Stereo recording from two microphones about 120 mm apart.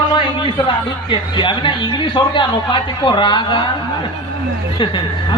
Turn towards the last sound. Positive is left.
turn(degrees=45)  # may be behind; listen again after turning